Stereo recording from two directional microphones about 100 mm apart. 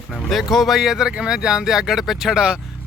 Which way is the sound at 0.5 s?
Centre (ahead or behind).